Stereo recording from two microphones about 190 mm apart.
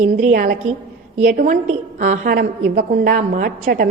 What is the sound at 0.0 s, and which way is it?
A woman's voice, 45° right (ahead or behind).